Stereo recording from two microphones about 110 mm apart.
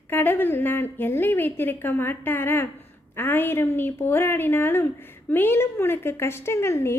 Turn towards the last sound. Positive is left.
turn(degrees=25)  # may be behind; listen again after turning